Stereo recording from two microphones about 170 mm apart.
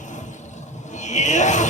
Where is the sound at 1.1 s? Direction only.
45° left (ahead or behind).